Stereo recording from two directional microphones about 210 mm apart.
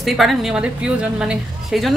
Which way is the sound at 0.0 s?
Centre (ahead or behind).